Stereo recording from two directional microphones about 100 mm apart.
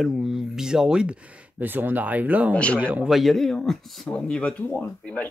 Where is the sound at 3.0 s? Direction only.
Centre (ahead or behind).